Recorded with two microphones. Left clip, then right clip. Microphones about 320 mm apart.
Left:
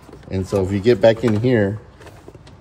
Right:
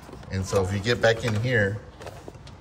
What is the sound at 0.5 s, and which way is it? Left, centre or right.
Speech, centre.